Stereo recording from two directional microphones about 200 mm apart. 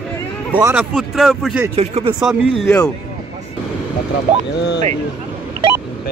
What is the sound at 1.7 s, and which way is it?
Speech, 30° right (ahead or behind).